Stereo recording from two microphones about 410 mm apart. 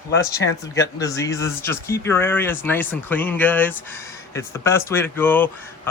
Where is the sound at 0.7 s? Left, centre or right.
Centre.